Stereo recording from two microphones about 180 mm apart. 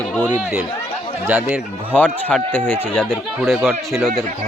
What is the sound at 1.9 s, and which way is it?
Speech, 5° left (ahead or behind).